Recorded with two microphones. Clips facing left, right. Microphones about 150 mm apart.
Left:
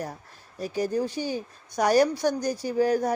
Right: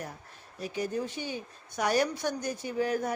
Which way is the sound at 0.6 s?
40° left (ahead or behind).